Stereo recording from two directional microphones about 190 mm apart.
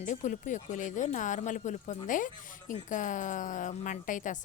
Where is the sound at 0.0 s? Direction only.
40° left (ahead or behind).